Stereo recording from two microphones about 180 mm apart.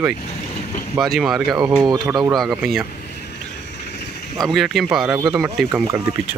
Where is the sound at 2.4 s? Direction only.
Centre (ahead or behind).